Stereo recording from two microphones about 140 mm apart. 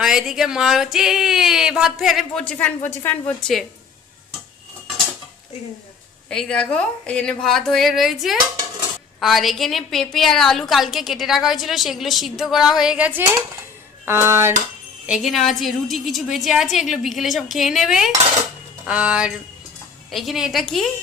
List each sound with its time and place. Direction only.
0.0 s a woman's voice: 5° right (ahead or behind)
6.2 s a woman's voice: 5° left (ahead or behind); by 13.2 s 10° right (ahead or behind)
14.0 s a sound: 15° right (ahead or behind)
15.0 s a woman's voice: centre (ahead or behind)
18.9 s a sound: 10° right (ahead or behind)
20.1 s a woman's voice: centre (ahead or behind)